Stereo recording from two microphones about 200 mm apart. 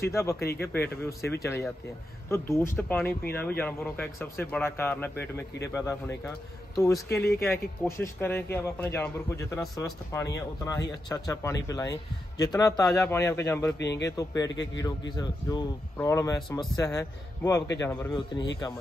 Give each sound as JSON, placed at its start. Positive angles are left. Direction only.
{"t": 0.1, "sound": "a man's voice", "side_deg": 15}
{"t": 13.7, "sound": "speech", "side_deg": 60}
{"t": 14.0, "sound": "a man's voice", "side_deg": 15}
{"t": 16.3, "sound": "speech", "side_deg": 0}
{"t": 16.7, "sound": "a man's voice", "side_deg": 15}
{"t": 18.1, "sound": "speech", "side_deg": 20}